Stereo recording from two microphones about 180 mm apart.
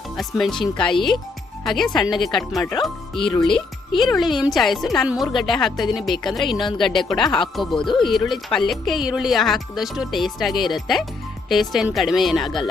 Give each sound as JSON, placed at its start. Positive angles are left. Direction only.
{"t": 0.2, "sound": "speech", "side_deg": 0}
{"t": 7.3, "sound": "speech", "side_deg": 25}
{"t": 7.5, "sound": "speech", "side_deg": 0}
{"t": 7.8, "sound": "speech", "side_deg": 25}
{"t": 8.0, "sound": "speech", "side_deg": 0}